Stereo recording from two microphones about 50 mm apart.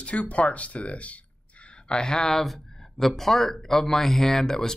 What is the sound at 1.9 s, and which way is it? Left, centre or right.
Speech, centre.